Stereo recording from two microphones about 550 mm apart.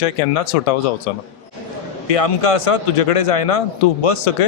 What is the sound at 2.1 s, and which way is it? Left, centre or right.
Speech, left.